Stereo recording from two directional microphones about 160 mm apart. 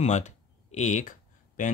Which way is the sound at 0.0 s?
45° left (ahead or behind).